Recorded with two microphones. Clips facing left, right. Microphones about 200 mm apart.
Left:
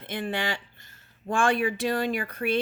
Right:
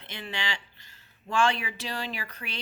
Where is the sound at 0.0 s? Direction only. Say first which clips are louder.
Left 7 dB; 50° left (ahead or behind).